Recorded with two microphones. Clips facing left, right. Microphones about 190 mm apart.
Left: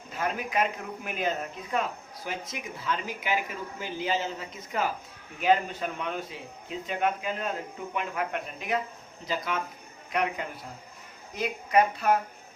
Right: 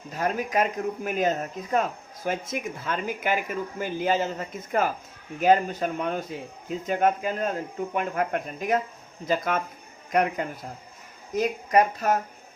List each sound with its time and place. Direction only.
0.1 s speech: 40° right (ahead or behind)